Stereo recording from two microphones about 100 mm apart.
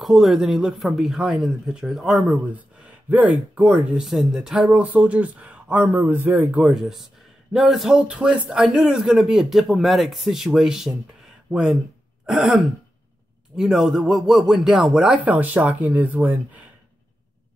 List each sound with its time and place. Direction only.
0.0 s speech: 5° right (ahead or behind)
2.4 s speech: 15° right (ahead or behind)